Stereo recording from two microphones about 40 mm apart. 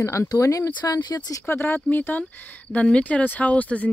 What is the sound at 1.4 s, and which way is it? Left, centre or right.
Speech, left.